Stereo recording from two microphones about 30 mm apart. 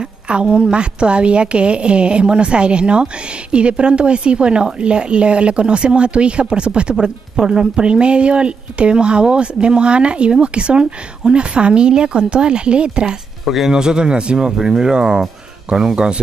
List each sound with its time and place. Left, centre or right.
0.0 s speech: right
13.7 s speech: right